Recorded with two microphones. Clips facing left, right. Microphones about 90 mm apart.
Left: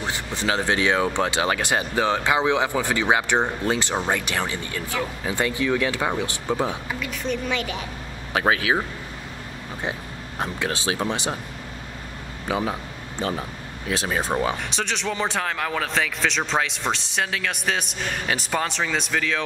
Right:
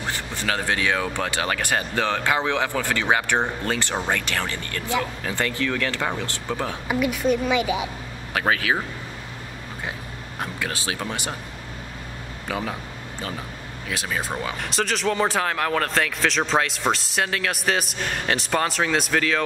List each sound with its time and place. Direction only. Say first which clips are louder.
0.0 s speech: left 2 dB; 20° left (ahead or behind)
6.9 s a woman's voice: right 6 dB; 10° right (ahead or behind)
8.3 s speech: left 1 dB; 20° left (ahead or behind)
10.4 s speech: left 3 dB; 25° left (ahead or behind)
12.4 s speech: left 3 dB; 20° left (ahead or behind)
13.8 s speech: left 3 dB; 30° left (ahead or behind)
14.6 s speech: right 3 dB; centre (ahead or behind)